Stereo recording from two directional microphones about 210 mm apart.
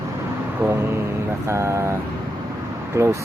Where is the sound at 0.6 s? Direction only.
10° right (ahead or behind).